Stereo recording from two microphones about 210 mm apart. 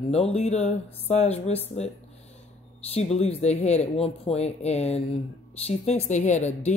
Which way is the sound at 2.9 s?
30° left (ahead or behind).